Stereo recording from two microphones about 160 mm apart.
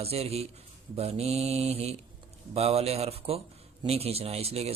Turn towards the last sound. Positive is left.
turn(degrees=-40)  # may be behind; listen again after turning